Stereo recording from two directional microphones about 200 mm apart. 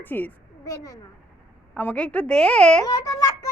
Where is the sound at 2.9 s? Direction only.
20° left (ahead or behind).